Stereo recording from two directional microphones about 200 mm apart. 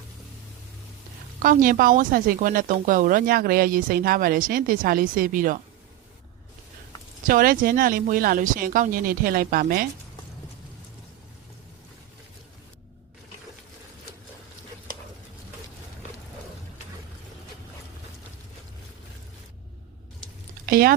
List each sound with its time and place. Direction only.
1.4 s speech: 45° right (ahead or behind)
7.3 s speech: 45° right (ahead or behind)
20.7 s a sound: 45° right (ahead or behind)